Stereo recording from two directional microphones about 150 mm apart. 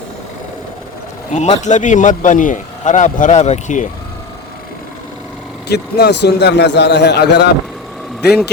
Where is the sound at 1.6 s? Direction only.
55° left (ahead or behind).